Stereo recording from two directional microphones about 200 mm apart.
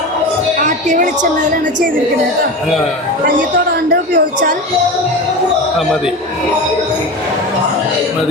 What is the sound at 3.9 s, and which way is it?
Speech, 45° right (ahead or behind).